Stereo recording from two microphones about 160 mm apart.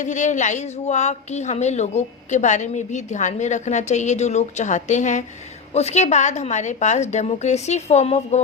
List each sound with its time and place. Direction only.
0.0 s a woman's voice: 50° left (ahead or behind)